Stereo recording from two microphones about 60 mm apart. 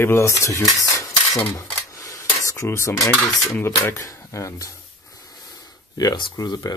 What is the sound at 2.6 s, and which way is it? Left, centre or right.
Speech, left.